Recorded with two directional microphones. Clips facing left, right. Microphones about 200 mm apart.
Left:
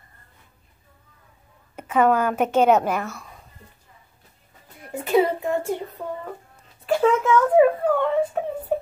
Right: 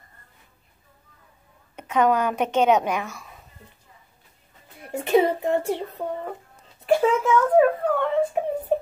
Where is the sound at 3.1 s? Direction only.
5° right (ahead or behind).